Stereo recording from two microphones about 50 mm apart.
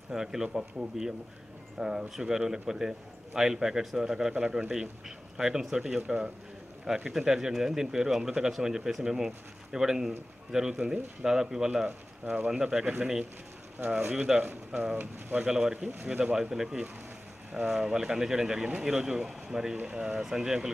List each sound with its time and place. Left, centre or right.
0.1 s speech: centre
14.4 s speech: right
15.4 s speech: centre
16.1 s speech: right
16.3 s speech: centre
19.8 s speech: right
20.1 s speech: centre